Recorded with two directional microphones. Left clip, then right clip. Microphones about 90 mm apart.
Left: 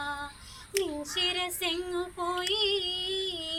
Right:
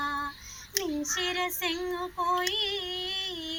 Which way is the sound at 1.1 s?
20° left (ahead or behind).